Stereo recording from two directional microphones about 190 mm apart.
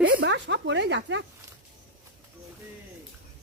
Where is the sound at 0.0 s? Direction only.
75° right (ahead or behind).